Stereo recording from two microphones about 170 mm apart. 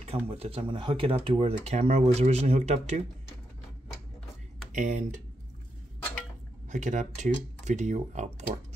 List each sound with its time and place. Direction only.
0.1 s speech: 35° right (ahead or behind)
4.7 s speech: 45° right (ahead or behind)
6.7 s speech: 45° right (ahead or behind)